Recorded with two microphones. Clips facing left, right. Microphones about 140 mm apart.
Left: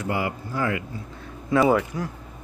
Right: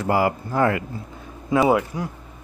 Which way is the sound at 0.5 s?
50° right (ahead or behind).